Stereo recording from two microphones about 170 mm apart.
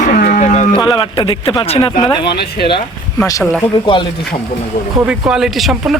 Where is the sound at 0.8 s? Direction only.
30° left (ahead or behind).